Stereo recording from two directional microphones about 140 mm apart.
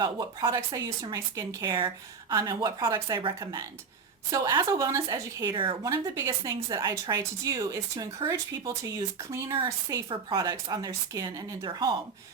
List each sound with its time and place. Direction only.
0.0 s a woman's voice: 30° right (ahead or behind)